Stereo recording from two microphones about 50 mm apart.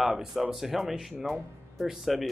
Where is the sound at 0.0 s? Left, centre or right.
Centre.